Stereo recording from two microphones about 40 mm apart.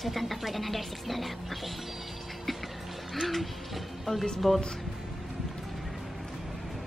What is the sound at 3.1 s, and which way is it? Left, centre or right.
Speech, centre.